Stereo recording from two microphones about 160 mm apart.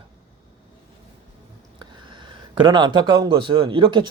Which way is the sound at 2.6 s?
30° right (ahead or behind).